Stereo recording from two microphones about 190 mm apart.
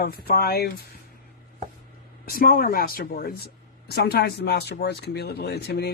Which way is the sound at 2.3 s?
50° left (ahead or behind).